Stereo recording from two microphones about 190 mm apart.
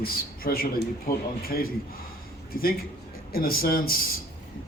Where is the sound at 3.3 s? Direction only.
50° left (ahead or behind).